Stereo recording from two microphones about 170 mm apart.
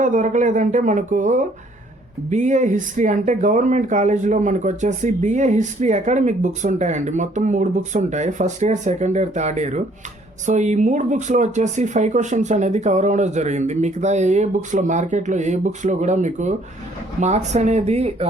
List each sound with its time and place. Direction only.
0.0 s speech: 45° right (ahead or behind)